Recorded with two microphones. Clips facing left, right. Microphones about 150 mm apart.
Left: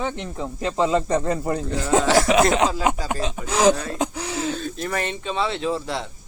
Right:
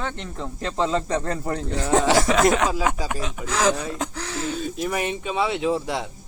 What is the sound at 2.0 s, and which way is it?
Speech, 15° right (ahead or behind).